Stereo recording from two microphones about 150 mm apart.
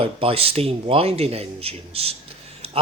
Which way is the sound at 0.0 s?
40° right (ahead or behind).